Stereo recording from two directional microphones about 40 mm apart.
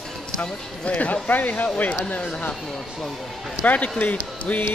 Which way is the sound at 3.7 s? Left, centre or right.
Left.